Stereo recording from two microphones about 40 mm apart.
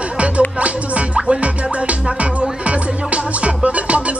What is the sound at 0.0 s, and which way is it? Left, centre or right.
Music, right.